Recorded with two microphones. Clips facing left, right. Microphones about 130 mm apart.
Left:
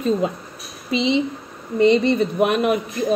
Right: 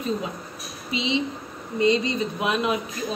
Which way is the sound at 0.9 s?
60° left (ahead or behind).